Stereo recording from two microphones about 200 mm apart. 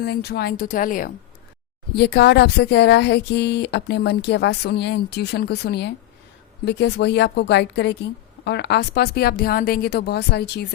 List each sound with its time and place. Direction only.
0.0 s a woman's voice: 55° left (ahead or behind)
2.0 s a woman's voice: 55° left (ahead or behind)